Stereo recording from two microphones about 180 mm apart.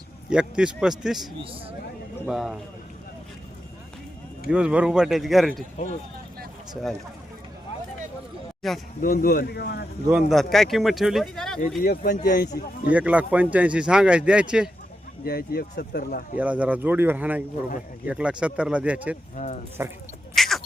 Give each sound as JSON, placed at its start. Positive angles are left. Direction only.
{"t": 0.3, "sound": "speech", "side_deg": -5}
{"t": 4.4, "sound": "speech", "side_deg": -5}
{"t": 5.7, "sound": "speech", "side_deg": 40}
{"t": 8.6, "sound": "speech", "side_deg": 0}
{"t": 9.0, "sound": "speech", "side_deg": 50}
{"t": 10.1, "sound": "speech", "side_deg": 0}
{"t": 11.8, "sound": "speech", "side_deg": 50}
{"t": 12.9, "sound": "speech", "side_deg": -10}
{"t": 15.2, "sound": "speech", "side_deg": 55}
{"t": 16.4, "sound": "speech", "side_deg": -5}
{"t": 20.3, "sound": "a sound", "side_deg": 0}